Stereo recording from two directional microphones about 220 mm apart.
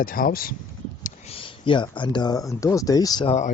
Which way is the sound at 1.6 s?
20° left (ahead or behind).